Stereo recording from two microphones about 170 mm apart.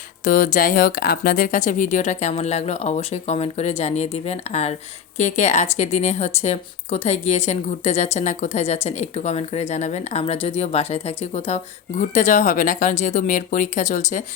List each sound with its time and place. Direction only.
0.3 s speech: 50° left (ahead or behind)